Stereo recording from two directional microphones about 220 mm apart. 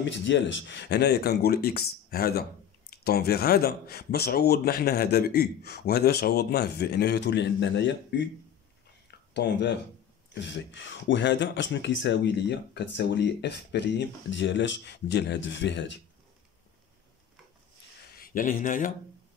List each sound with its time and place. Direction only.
0.0 s speech: 55° left (ahead or behind)
9.3 s speech: 50° left (ahead or behind)
18.1 s speech: 40° left (ahead or behind)